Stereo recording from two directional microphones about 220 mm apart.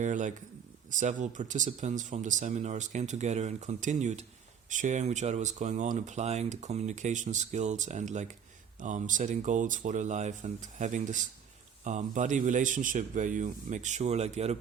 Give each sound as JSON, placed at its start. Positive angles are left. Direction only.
{"t": 0.0, "sound": "speech", "side_deg": -35}